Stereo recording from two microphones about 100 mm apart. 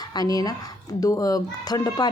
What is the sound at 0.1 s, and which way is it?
A woman's voice, 40° left (ahead or behind).